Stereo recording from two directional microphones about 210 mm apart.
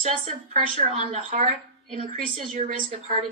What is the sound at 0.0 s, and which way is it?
A woman's voice, 30° right (ahead or behind).